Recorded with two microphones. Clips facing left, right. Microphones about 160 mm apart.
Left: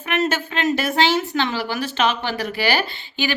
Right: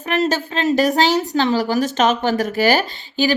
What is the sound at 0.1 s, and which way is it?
A woman's voice, 35° right (ahead or behind).